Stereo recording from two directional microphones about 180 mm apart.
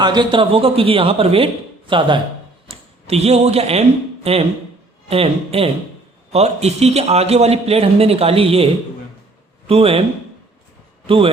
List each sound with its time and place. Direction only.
0.0 s a man's voice: 25° right (ahead or behind)
11.0 s speech: 30° right (ahead or behind)